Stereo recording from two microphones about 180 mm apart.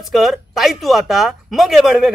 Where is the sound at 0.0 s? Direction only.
Centre (ahead or behind).